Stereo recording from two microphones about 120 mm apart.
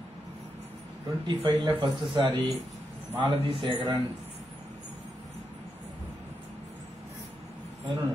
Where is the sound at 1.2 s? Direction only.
40° right (ahead or behind).